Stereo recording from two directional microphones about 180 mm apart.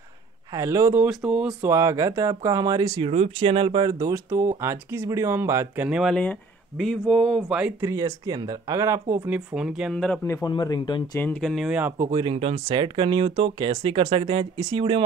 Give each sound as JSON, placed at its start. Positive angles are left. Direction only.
{"t": 0.5, "sound": "speech", "side_deg": -20}
{"t": 3.1, "sound": "speech", "side_deg": -35}
{"t": 5.9, "sound": "speech", "side_deg": -5}
{"t": 7.8, "sound": "speech", "side_deg": -20}
{"t": 11.1, "sound": "speech", "side_deg": 5}
{"t": 12.0, "sound": "speech", "side_deg": -25}